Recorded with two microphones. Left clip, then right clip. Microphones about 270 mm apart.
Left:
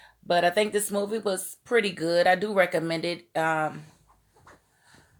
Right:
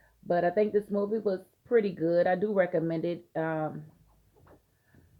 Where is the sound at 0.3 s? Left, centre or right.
Centre.